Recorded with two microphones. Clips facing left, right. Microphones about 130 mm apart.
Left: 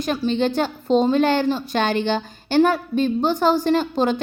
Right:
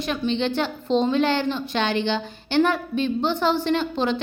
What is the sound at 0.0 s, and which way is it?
A woman's voice, 40° left (ahead or behind).